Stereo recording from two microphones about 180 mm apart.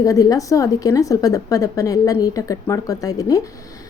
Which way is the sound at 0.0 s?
20° left (ahead or behind).